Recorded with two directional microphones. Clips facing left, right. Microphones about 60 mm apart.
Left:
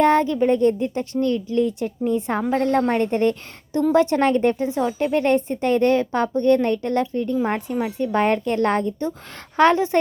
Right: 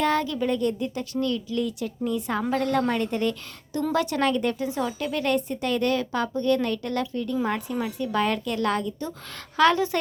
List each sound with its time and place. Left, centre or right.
0.0 s speech: left